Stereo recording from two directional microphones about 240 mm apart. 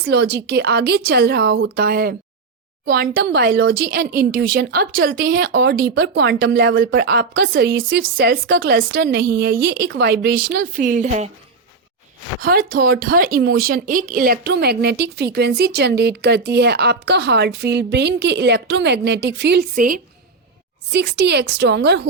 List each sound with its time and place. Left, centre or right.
0.0 s a woman's voice: right
10.5 s a woman's voice: right
12.4 s speech: right